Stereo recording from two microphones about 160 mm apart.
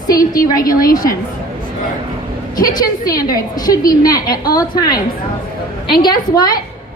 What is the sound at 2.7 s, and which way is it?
A woman's voice, 25° left (ahead or behind).